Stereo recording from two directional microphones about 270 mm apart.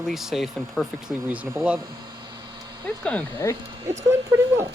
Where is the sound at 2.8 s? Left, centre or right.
Centre.